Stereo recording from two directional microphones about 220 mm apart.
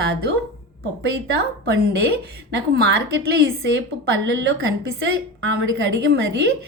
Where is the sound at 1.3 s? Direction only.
50° right (ahead or behind).